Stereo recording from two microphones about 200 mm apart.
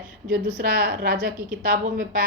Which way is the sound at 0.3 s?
50° right (ahead or behind).